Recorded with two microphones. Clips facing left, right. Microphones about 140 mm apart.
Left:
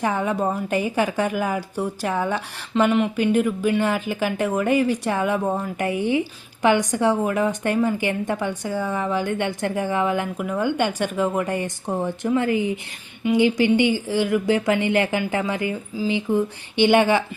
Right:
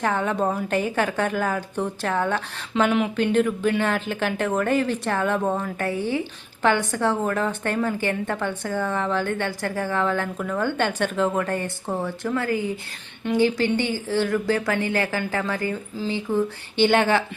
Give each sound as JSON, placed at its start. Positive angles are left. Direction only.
{"t": 0.0, "sound": "a woman's voice", "side_deg": 10}